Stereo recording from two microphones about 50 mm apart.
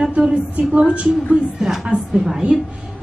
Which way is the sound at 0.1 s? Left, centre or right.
Centre.